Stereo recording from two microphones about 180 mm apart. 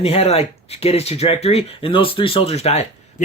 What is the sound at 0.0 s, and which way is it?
Speech, 35° left (ahead or behind).